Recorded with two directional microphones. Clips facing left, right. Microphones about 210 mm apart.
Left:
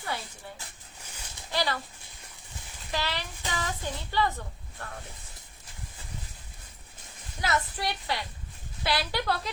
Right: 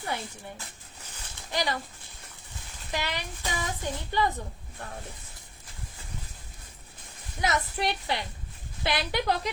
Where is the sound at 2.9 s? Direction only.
15° right (ahead or behind).